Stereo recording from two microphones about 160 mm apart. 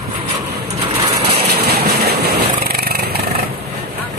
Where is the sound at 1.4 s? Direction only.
80° right.